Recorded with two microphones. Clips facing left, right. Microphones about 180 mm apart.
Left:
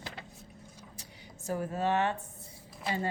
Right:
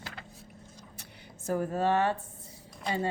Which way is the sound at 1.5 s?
40° right (ahead or behind).